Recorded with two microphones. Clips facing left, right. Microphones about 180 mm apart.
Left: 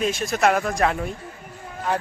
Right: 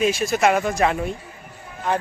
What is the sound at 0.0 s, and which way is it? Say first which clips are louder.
Speech: right 2 dB; 5° right (ahead or behind).